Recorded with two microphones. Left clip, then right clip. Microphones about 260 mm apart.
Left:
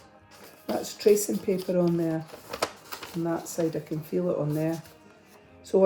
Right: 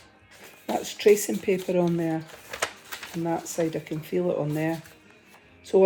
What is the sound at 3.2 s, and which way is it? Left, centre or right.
Speech, right.